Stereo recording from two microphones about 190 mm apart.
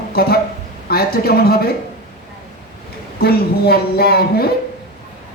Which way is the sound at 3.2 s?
55° left (ahead or behind).